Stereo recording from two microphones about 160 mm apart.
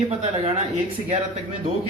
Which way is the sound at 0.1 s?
40° right (ahead or behind).